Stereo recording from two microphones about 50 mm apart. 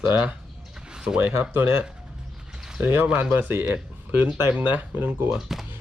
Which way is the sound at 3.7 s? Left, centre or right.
Right.